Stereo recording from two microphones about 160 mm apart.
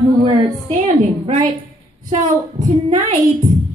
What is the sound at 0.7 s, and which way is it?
A woman's voice, 50° right (ahead or behind).